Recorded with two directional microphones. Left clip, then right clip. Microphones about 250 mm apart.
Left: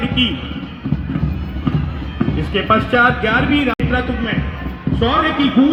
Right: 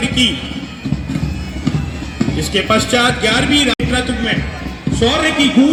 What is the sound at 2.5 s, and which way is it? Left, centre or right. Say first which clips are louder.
A man's voice: even; right.